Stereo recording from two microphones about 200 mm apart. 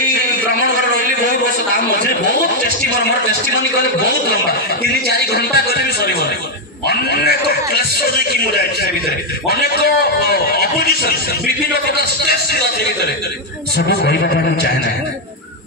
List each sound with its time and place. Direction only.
0.7 s a sound: 45° right (ahead or behind)
1.9 s a man's voice: 45° right (ahead or behind)
3.0 s a man's voice: 55° left (ahead or behind)
6.9 s a man's voice: 50° left (ahead or behind)
9.5 s a man's voice: 50° left (ahead or behind)
13.7 s a man's voice: 50° left (ahead or behind)